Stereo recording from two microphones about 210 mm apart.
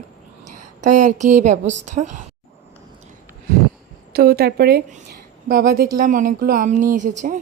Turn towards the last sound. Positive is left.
turn(degrees=-40)  # may be behind; listen again after turning